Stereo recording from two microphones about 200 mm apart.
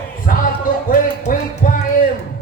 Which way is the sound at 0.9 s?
40° left (ahead or behind).